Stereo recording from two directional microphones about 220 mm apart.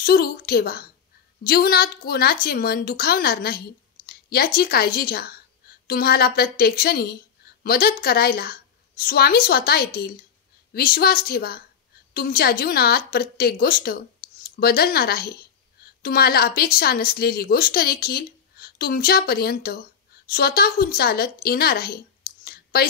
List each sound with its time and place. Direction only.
0.0 s a woman's voice: 45° left (ahead or behind)